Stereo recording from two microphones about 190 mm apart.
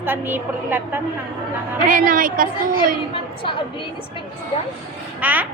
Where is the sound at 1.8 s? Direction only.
45° right (ahead or behind).